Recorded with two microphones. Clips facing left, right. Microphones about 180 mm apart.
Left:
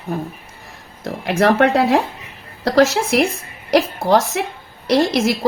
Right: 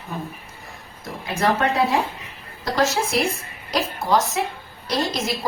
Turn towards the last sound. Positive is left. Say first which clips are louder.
# left 9 dB
turn(degrees=70)  # may be behind; listen again after turning